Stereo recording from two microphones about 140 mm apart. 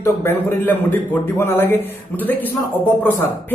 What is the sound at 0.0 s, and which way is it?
A man's voice, 15° left (ahead or behind).